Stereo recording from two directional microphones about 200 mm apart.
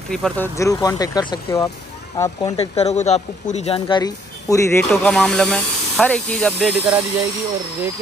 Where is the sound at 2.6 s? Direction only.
35° left (ahead or behind); by 4.8 s 15° left (ahead or behind).